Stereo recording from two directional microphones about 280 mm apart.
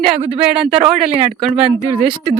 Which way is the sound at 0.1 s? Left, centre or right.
Centre.